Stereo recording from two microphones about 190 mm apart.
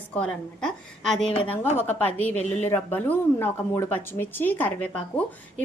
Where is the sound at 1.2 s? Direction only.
30° left (ahead or behind).